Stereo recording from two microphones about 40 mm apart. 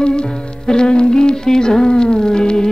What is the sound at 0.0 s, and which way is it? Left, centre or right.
Music, left.